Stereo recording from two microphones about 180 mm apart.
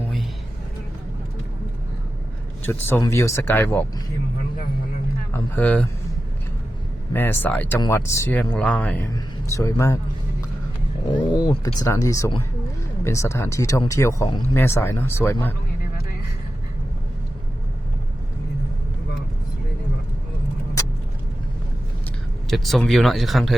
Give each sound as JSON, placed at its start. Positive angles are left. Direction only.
{"t": 2.8, "sound": "speech", "side_deg": 15}
{"t": 5.3, "sound": "a sound", "side_deg": 10}
{"t": 7.1, "sound": "speech", "side_deg": 10}
{"t": 9.1, "sound": "speech", "side_deg": 15}
{"t": 11.3, "sound": "speech", "side_deg": 20}
{"t": 22.4, "sound": "speech", "side_deg": 0}